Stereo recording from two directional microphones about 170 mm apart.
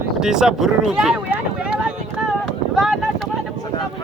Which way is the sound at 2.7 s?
Centre (ahead or behind).